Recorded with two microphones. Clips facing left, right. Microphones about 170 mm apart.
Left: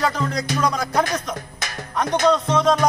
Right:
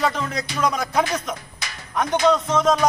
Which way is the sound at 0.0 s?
5° right (ahead or behind).